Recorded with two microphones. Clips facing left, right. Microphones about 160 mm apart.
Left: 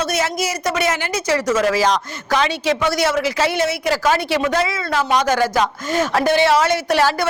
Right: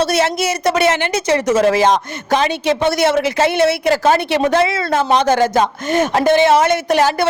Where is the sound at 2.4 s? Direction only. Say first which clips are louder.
Right 3 dB; 55° right (ahead or behind).